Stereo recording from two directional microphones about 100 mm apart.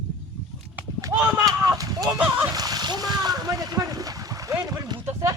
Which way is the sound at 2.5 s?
40° right (ahead or behind).